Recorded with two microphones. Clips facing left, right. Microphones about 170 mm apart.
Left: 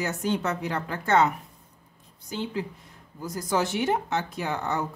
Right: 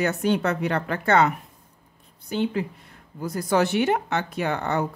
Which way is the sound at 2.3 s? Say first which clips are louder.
Right 6 dB; 60° right (ahead or behind).